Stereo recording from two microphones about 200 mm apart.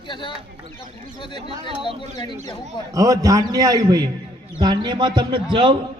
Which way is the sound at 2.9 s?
15° right (ahead or behind).